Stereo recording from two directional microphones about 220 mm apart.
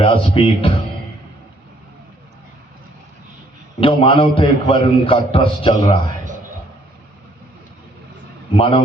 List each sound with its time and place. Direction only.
0.0 s a man's voice: 25° left (ahead or behind)
3.8 s a man's voice: 25° left (ahead or behind)
8.5 s a man's voice: 25° left (ahead or behind)